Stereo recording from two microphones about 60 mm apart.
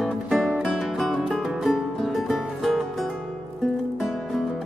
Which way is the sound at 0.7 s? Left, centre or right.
Centre.